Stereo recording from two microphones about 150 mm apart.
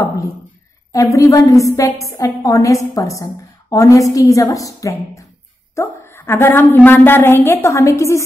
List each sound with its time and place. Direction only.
0.9 s a woman's voice: 20° left (ahead or behind)